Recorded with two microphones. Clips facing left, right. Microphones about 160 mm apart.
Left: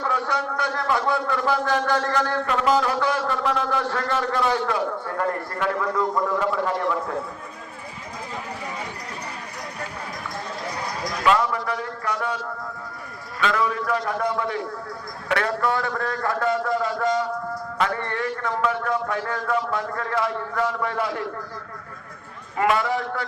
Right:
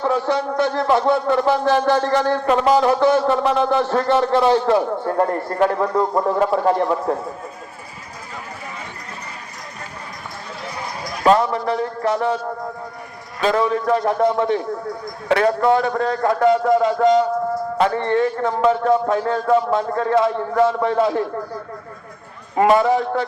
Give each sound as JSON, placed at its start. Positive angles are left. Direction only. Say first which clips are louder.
{"t": 0.0, "sound": "a man's voice", "louder": "right 6 dB", "side_deg": -25}
{"t": 11.2, "sound": "a man's voice", "louder": "right 6 dB", "side_deg": -35}
{"t": 13.4, "sound": "a man's voice", "louder": "right 6 dB", "side_deg": -30}
{"t": 22.5, "sound": "a man's voice", "louder": "right 7 dB", "side_deg": -30}